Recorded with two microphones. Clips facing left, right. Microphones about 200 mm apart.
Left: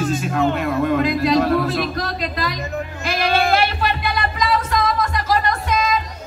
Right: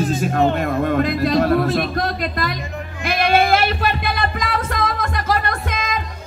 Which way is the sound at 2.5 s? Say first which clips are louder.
Left 3 dB; 45° left (ahead or behind).